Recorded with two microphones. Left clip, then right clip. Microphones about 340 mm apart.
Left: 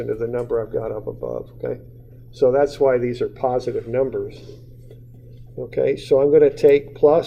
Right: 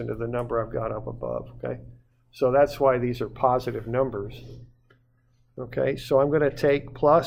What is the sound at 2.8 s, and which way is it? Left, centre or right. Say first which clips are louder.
Speech: left 7 dB; right.